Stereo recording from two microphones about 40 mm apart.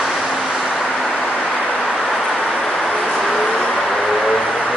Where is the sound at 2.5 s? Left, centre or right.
Centre.